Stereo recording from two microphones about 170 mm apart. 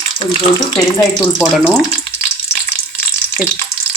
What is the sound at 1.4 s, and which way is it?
Speech, centre (ahead or behind).